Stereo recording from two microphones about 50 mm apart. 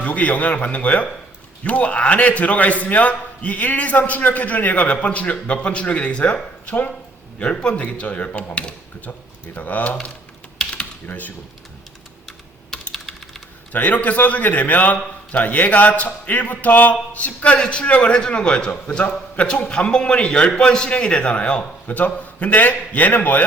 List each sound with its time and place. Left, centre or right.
0.0 s a man's voice: left
11.0 s a man's voice: left
13.7 s a man's voice: left
21.8 s a man's voice: left